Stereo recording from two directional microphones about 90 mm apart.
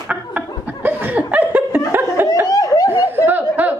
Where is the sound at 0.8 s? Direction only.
15° right (ahead or behind).